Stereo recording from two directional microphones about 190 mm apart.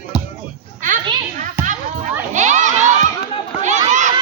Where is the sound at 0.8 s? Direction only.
40° right (ahead or behind).